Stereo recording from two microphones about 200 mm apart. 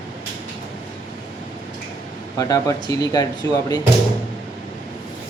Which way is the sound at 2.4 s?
15° left (ahead or behind).